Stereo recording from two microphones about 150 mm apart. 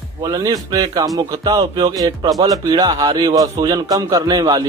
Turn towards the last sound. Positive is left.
turn(degrees=-30)  # may be behind; listen again after turning